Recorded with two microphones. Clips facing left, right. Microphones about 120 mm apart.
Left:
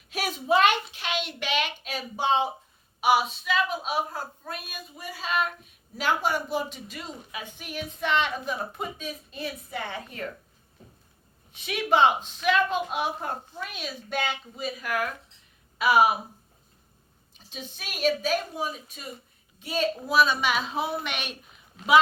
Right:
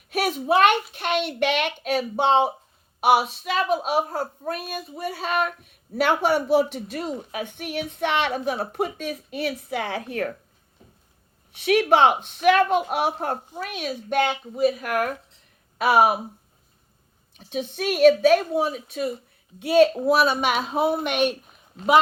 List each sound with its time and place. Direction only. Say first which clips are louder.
0.1 s a child's voice: right 3 dB; 60° right (ahead or behind)
11.5 s speech: right 6 dB; 65° right (ahead or behind)
17.3 s a woman's voice: right 13 dB; 60° right (ahead or behind)